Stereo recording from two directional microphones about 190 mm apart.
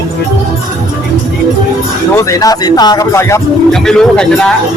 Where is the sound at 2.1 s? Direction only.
15° left (ahead or behind).